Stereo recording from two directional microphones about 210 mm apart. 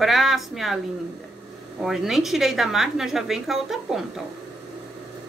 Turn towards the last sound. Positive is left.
turn(degrees=0)  # may be behind; listen again after turning